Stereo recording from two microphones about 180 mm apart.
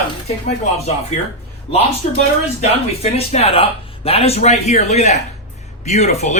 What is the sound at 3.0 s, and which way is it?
Speech, 35° left (ahead or behind).